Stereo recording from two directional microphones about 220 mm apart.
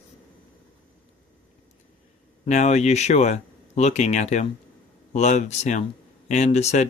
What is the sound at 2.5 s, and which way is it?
Speech, 30° left (ahead or behind).